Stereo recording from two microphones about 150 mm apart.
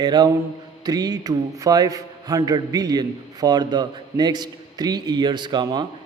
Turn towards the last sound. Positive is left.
turn(degrees=-30)  # may be behind; listen again after turning